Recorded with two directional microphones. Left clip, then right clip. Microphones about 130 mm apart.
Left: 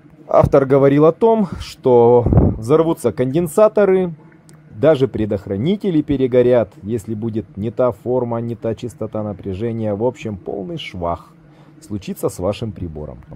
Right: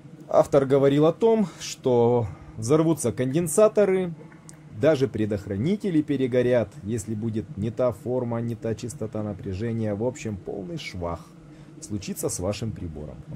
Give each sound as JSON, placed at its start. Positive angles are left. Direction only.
{"t": 0.3, "sound": "speech", "side_deg": 50}